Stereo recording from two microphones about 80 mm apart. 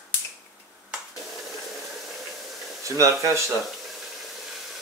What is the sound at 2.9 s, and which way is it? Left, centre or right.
Speech, right.